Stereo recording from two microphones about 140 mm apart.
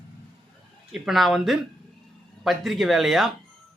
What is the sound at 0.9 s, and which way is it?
Speech, centre (ahead or behind).